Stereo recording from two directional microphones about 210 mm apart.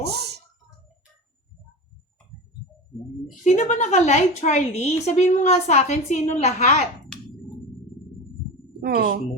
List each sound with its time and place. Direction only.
0.0 s a sound: 50° right (ahead or behind)
3.4 s a woman's voice: 35° left (ahead or behind)
8.8 s a woman's voice: 45° right (ahead or behind)